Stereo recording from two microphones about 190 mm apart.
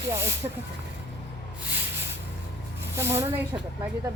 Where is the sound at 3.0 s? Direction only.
15° right (ahead or behind).